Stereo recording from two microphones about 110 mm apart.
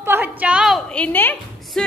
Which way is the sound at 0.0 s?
20° right (ahead or behind).